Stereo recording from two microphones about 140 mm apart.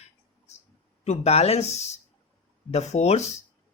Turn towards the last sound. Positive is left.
turn(degrees=50)  # may be behind; listen again after turning